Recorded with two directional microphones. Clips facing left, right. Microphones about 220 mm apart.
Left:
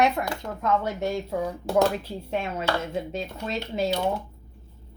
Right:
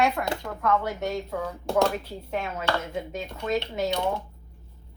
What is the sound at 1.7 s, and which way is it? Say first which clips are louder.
Speech: left 2 dB; 5° left (ahead or behind).